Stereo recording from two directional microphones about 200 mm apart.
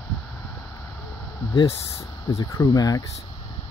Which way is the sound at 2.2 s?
20° left (ahead or behind).